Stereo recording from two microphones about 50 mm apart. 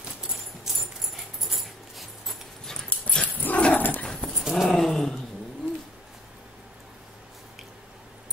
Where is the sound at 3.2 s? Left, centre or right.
Left.